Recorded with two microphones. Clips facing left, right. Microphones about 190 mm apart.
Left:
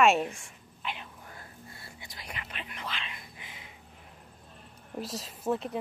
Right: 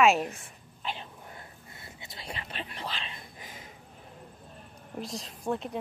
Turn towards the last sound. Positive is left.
turn(degrees=0)  # may be behind; listen again after turning